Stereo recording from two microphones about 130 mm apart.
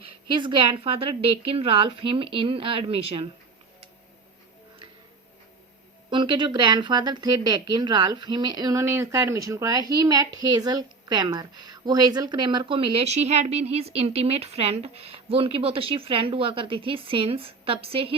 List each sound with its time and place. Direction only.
0.0 s a woman's voice: 40° right (ahead or behind)
6.1 s a woman's voice: 40° right (ahead or behind)